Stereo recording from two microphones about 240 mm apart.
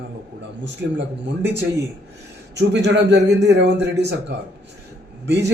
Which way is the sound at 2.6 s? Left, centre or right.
Right.